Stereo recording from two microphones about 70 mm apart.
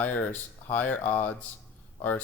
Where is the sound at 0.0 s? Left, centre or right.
Left.